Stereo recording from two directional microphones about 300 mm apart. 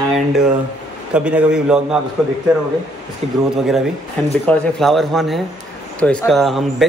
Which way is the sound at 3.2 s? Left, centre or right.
Right.